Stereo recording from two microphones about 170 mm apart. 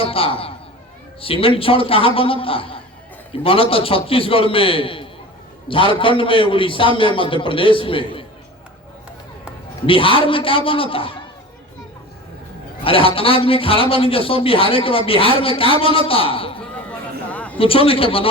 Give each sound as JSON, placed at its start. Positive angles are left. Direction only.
{"t": 0.0, "sound": "a man's voice", "side_deg": 35}
{"t": 9.8, "sound": "a man's voice", "side_deg": 30}
{"t": 12.8, "sound": "a man's voice", "side_deg": 30}
{"t": 17.3, "sound": "a sound", "side_deg": 10}
{"t": 17.6, "sound": "a man's voice", "side_deg": 35}